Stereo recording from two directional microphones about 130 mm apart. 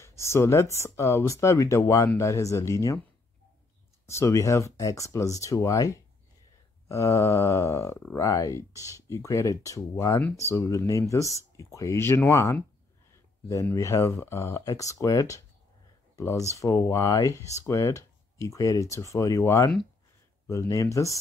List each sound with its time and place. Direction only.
0.0 s speech: 20° left (ahead or behind)
4.1 s speech: 20° left (ahead or behind)